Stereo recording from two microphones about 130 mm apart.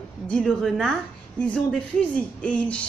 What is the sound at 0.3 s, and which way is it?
Speech, 5° left (ahead or behind).